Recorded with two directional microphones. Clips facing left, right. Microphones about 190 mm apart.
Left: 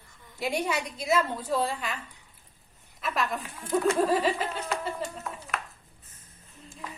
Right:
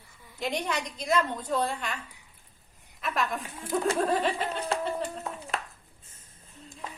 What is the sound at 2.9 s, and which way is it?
A woman's voice, centre (ahead or behind).